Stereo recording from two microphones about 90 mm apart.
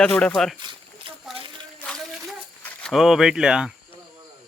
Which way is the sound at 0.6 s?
70° right (ahead or behind).